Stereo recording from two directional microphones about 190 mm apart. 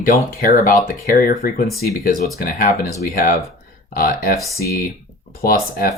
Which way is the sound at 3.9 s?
50° left (ahead or behind).